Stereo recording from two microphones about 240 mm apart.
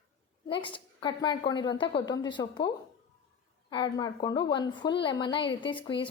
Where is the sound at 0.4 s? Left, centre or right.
Left.